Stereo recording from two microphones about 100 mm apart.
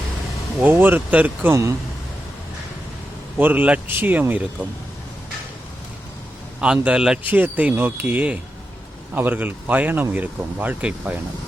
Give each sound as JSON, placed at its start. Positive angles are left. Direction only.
{"t": 0.6, "sound": "speech", "side_deg": -20}
{"t": 3.3, "sound": "speech", "side_deg": -15}
{"t": 6.8, "sound": "speech", "side_deg": -10}